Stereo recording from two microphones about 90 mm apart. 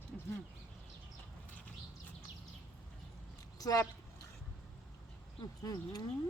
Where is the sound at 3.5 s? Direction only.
40° left (ahead or behind).